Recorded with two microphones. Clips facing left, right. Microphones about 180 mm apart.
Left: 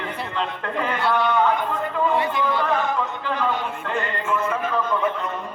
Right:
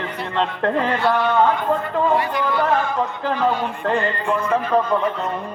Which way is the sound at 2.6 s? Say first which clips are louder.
Right 3 dB; 40° right (ahead or behind).